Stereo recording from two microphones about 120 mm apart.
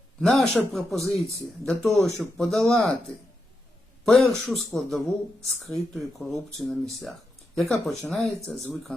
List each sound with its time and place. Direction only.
0.2 s speech: centre (ahead or behind)
4.0 s speech: centre (ahead or behind)